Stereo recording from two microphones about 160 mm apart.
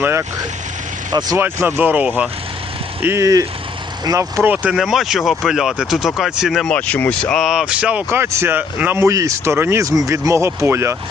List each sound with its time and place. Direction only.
0.0 s speech: 15° right (ahead or behind)
1.4 s speech: 15° right (ahead or behind)